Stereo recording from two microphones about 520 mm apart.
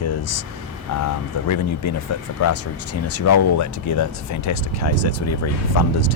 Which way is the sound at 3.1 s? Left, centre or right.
Left.